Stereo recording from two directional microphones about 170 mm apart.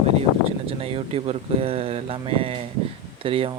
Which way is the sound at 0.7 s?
35° right (ahead or behind).